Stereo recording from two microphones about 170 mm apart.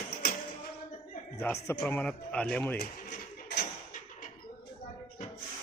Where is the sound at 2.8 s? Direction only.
65° left (ahead or behind).